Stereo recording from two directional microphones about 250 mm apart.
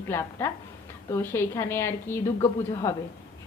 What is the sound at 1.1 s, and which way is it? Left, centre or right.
A woman's voice, centre.